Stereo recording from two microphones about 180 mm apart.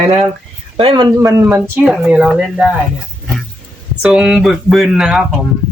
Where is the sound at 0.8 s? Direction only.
25° right (ahead or behind); by 2.6 s centre (ahead or behind).